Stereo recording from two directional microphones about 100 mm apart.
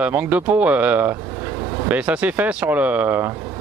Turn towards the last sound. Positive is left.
turn(degrees=-20)  # may be behind; listen again after turning